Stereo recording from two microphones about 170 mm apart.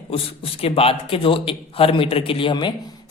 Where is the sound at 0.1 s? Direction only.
35° left (ahead or behind).